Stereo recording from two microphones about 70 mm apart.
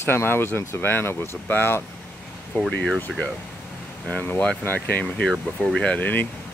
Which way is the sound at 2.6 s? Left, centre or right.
Centre.